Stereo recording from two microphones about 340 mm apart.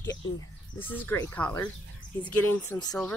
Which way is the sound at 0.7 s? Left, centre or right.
Centre.